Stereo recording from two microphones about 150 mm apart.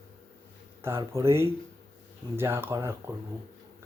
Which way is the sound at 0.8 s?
15° right (ahead or behind).